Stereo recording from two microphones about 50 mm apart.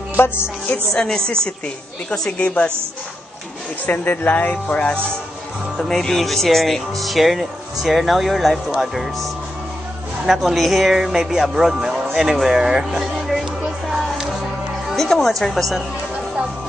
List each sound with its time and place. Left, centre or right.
0.2 s music: left
0.9 s a woman's voice: centre
2.3 s a woman's voice: left
3.8 s speech: left
5.8 s speech: centre
10.2 s speech: centre
13.8 s music: centre
15.0 s speech: centre